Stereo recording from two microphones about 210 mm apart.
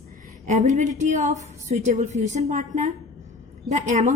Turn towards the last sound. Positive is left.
turn(degrees=-35)  # may be behind; listen again after turning